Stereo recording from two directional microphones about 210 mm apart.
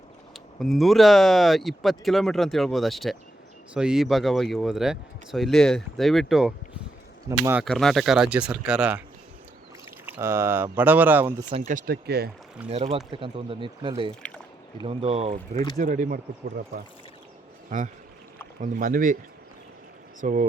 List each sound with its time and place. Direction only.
0.3 s speech: centre (ahead or behind)
7.6 s speech: centre (ahead or behind)
10.1 s speech: 10° right (ahead or behind)
11.5 s speech: 40° right (ahead or behind)
12.6 s speech: 30° right (ahead or behind)
14.2 s a sound: 5° left (ahead or behind)
14.8 s speech: 25° right (ahead or behind)
15.8 s speech: 40° right (ahead or behind)
20.2 s speech: 40° right (ahead or behind)